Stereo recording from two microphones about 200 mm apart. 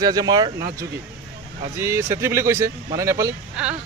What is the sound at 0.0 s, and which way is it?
Speech, 20° right (ahead or behind).